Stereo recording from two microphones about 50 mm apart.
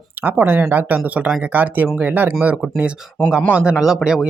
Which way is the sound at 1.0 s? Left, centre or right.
Right.